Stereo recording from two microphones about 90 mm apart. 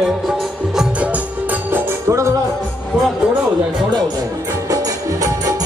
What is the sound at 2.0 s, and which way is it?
Speech, 35° right (ahead or behind).